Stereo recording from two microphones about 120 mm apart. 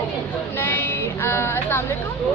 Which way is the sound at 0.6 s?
15° left (ahead or behind).